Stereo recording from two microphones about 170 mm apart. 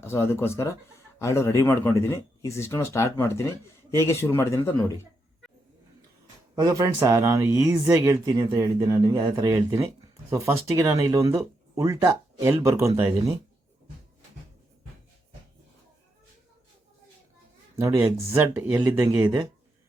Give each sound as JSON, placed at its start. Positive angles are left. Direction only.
{"t": 0.0, "sound": "speech", "side_deg": 15}
{"t": 6.6, "sound": "speech", "side_deg": -20}
{"t": 17.7, "sound": "speech", "side_deg": -15}